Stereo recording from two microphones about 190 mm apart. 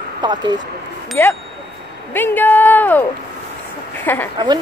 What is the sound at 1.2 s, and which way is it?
Speech, 10° left (ahead or behind).